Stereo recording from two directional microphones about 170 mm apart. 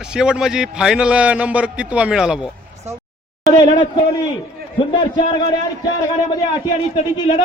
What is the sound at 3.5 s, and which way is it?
A man's voice, 30° left (ahead or behind).